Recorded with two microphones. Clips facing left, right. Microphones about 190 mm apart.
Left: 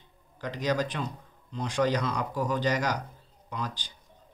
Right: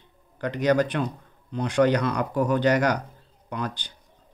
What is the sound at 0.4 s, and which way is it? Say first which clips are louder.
Speech: right 7 dB; 60° right (ahead or behind).